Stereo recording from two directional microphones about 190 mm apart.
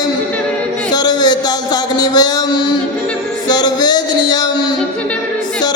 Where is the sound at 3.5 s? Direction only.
20° left (ahead or behind).